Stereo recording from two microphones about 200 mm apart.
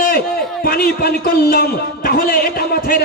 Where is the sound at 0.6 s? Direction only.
50° left (ahead or behind).